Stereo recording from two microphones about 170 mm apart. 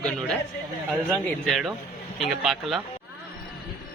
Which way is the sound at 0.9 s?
Centre (ahead or behind).